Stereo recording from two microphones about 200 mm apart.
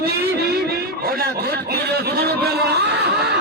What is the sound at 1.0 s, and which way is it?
A man's voice, 50° right (ahead or behind).